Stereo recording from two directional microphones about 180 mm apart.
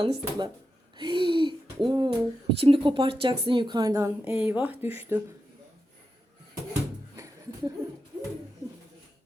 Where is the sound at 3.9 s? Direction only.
10° right (ahead or behind).